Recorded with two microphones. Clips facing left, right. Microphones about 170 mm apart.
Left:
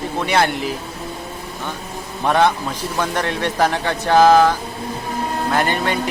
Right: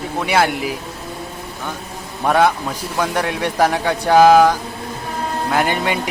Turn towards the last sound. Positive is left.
turn(degrees=-15)  # may be behind; listen again after turning